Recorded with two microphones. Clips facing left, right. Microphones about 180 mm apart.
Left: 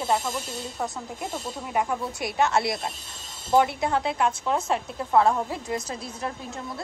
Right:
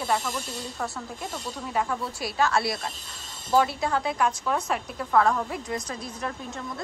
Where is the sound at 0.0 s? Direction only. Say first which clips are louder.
Left 2 dB; 20° left (ahead or behind).